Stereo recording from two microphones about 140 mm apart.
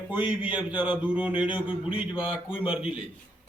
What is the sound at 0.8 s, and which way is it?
Speech, 10° right (ahead or behind).